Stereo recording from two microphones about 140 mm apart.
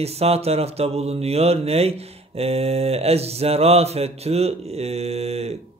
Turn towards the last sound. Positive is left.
turn(degrees=-50)  # may be behind; listen again after turning